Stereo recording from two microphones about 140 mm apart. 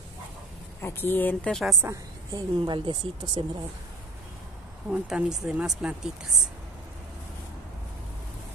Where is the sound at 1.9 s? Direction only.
25° right (ahead or behind).